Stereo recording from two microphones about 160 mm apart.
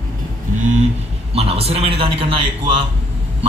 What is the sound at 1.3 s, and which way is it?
A man's voice, 40° right (ahead or behind).